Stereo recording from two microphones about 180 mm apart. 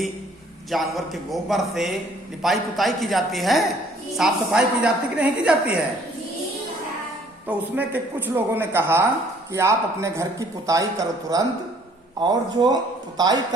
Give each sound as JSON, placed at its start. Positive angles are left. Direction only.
{"t": 0.7, "sound": "a man's voice", "side_deg": 0}
{"t": 7.4, "sound": "a man's voice", "side_deg": -10}